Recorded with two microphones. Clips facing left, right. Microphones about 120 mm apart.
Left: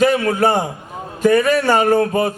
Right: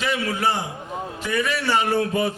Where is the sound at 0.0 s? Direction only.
45° left (ahead or behind).